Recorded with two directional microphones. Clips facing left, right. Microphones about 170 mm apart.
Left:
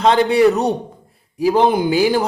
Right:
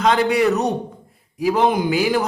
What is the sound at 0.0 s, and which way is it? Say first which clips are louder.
Speech: left 4 dB; 30° left (ahead or behind).